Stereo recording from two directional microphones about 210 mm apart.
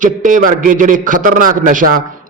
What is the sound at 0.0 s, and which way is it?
A man's voice, 40° right (ahead or behind).